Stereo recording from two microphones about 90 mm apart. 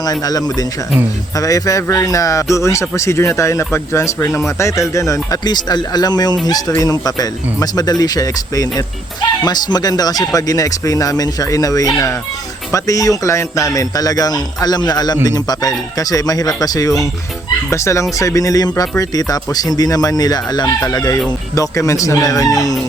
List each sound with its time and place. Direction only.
0.0 s speech: 45° left (ahead or behind)
5.5 s speech: 50° left (ahead or behind)